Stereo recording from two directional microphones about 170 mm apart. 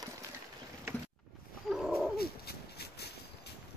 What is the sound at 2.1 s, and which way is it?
Horse, 70° left (ahead or behind).